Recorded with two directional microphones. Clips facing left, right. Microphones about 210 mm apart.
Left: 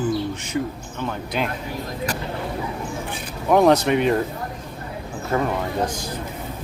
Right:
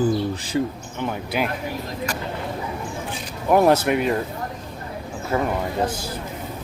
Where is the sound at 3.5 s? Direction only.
5° right (ahead or behind).